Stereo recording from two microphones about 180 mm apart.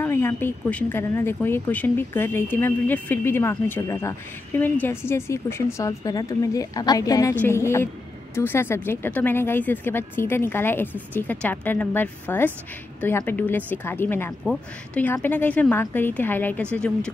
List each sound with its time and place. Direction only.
0.0 s speech: 15° left (ahead or behind)